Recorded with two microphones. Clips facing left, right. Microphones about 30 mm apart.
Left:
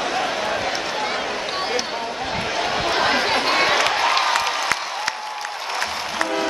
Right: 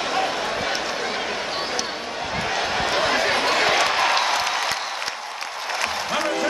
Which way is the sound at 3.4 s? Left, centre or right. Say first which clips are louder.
Left 2 dB; centre.